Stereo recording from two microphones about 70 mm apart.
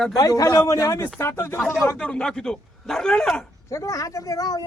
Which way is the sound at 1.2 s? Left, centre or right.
Left.